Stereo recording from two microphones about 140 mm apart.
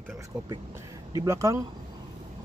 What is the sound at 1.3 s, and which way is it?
Speech, 25° right (ahead or behind).